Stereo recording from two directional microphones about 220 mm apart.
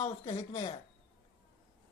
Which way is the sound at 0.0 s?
25° left (ahead or behind).